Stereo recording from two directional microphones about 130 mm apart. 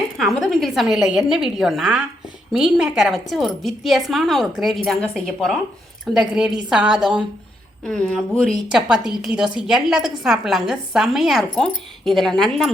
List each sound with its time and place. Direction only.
0.2 s a woman's voice: centre (ahead or behind)
7.9 s a woman's voice: 10° left (ahead or behind)